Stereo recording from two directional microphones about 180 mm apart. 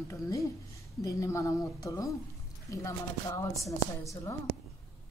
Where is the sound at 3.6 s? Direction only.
15° left (ahead or behind).